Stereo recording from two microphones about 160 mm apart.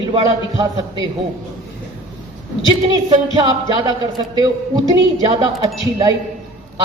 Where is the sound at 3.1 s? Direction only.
25° right (ahead or behind).